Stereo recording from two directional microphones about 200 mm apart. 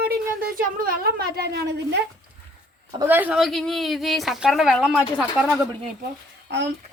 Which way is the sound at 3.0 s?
10° right (ahead or behind).